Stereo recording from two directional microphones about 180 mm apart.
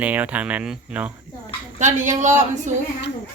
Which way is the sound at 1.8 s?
45° right (ahead or behind).